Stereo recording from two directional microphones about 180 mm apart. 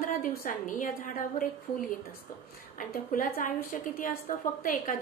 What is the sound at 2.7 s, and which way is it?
A woman's voice, 50° left (ahead or behind).